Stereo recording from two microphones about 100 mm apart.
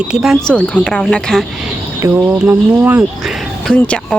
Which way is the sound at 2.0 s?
20° right (ahead or behind).